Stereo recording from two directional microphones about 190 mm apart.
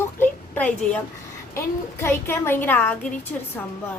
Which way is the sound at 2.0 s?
10° left (ahead or behind).